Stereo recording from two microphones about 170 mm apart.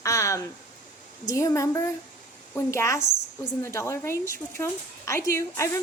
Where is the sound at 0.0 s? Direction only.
20° left (ahead or behind).